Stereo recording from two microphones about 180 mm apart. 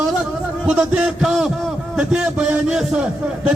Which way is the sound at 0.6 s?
5° right (ahead or behind).